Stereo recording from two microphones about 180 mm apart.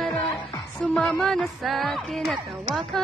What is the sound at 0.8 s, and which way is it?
Speech, 5° left (ahead or behind).